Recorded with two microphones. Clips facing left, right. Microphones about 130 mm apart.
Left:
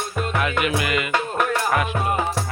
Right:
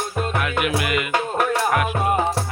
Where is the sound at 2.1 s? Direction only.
25° right (ahead or behind).